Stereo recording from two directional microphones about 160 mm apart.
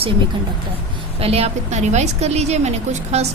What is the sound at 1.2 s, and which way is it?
A woman's voice, 40° right (ahead or behind).